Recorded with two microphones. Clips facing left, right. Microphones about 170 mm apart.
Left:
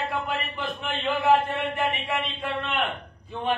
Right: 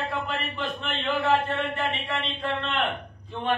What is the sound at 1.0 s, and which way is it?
Chant, 15° left (ahead or behind).